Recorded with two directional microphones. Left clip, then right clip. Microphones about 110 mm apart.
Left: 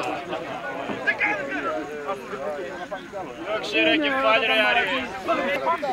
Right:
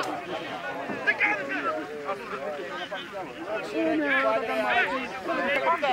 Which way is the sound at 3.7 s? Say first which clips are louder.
Left 5 dB; 60° left (ahead or behind).